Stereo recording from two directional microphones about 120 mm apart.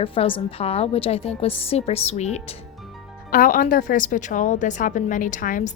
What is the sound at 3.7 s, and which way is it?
A woman's voice, 90° left.